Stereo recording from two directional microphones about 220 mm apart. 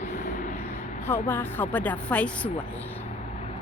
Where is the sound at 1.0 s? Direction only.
10° left (ahead or behind).